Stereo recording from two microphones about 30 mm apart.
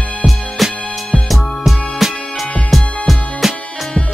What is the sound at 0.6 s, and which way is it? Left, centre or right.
Music, centre.